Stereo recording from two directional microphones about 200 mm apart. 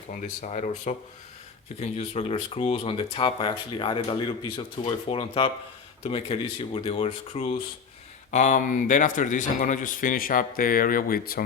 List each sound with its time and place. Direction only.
0.1 s a man's voice: 35° left (ahead or behind)
1.8 s a man's voice: 30° left (ahead or behind)